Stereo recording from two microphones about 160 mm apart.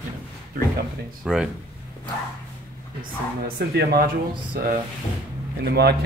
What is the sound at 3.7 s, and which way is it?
Speech, 70° right (ahead or behind).